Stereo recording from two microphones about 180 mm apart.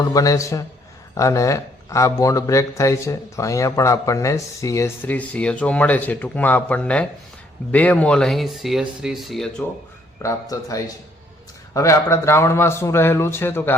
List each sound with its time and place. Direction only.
0.0 s speech: 20° left (ahead or behind); by 9.6 s 5° left (ahead or behind)
10.2 s speech: 20° left (ahead or behind)